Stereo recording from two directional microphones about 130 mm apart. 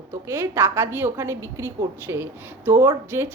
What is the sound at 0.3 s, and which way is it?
A woman's voice, 20° right (ahead or behind).